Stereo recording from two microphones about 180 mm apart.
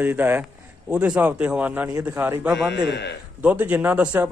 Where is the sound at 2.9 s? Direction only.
75° left (ahead or behind).